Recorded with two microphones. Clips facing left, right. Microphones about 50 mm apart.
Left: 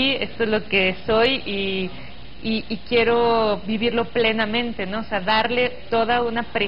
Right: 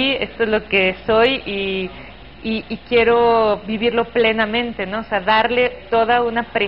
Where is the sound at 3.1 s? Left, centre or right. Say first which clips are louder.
Right 5 dB; centre.